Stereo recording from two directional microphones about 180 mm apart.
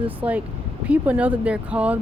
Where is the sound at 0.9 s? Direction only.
5° right (ahead or behind).